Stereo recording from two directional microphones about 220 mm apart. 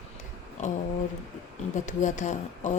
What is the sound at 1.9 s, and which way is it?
Speech, 35° left (ahead or behind).